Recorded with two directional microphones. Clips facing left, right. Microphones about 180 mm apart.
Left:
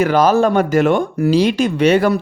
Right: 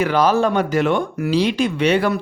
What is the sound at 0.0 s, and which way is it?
Speech, 45° left (ahead or behind).